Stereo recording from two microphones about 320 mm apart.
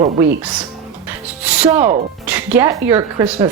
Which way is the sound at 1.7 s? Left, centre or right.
Right.